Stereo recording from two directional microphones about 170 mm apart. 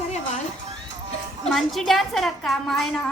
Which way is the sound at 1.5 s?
Centre (ahead or behind).